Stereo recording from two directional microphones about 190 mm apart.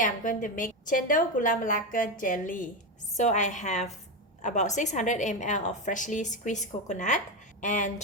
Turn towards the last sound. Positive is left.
turn(degrees=40)  # may be behind; listen again after turning